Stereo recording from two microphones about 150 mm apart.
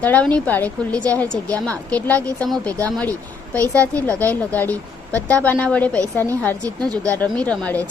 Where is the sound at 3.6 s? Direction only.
20° right (ahead or behind).